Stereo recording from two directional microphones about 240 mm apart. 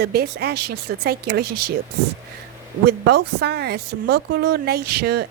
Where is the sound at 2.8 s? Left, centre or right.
Right.